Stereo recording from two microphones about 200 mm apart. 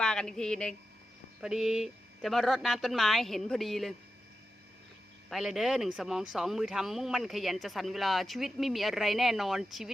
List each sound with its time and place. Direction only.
0.0 s speech: 5° left (ahead or behind)
5.3 s speech: centre (ahead or behind)